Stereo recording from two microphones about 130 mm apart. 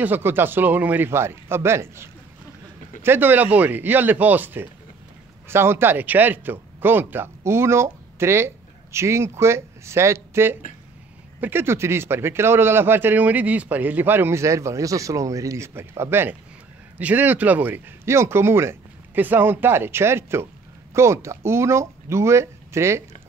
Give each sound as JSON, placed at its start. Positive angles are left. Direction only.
{"t": 0.0, "sound": "a man's voice", "side_deg": -15}